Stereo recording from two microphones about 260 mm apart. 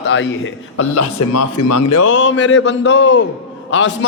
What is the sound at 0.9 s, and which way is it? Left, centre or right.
Speech, left.